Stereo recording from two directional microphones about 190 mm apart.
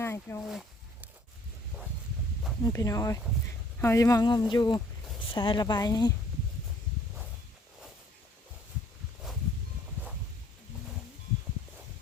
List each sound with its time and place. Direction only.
0.0 s speech: 15° left (ahead or behind)
2.6 s a woman's voice: 15° left (ahead or behind)